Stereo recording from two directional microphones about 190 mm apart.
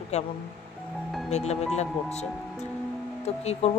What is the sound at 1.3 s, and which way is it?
Speech, 35° left (ahead or behind).